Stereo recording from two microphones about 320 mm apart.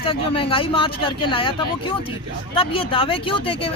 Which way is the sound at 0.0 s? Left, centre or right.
Centre.